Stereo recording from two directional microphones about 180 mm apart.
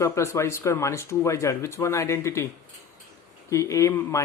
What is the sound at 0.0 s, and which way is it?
Speech, 15° left (ahead or behind).